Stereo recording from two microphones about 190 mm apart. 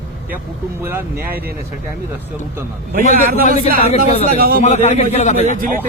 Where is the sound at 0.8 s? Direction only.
10° right (ahead or behind).